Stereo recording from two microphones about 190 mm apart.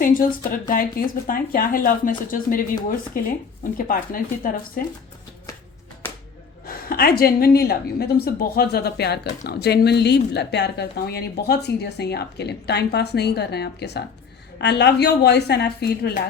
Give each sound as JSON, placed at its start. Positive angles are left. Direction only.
{"t": 0.0, "sound": "speech", "side_deg": 45}
{"t": 6.7, "sound": "a woman's voice", "side_deg": 50}